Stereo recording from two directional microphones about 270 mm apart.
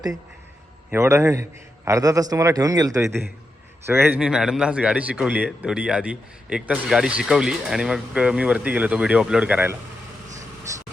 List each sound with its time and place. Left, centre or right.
0.9 s a man's voice: centre